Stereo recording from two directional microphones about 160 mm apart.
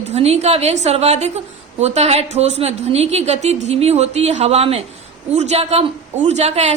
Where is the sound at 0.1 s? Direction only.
40° right (ahead or behind).